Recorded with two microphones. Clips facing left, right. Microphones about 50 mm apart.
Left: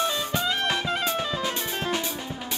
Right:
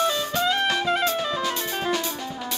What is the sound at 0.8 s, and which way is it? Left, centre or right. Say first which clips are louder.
Music: right 4 dB; centre.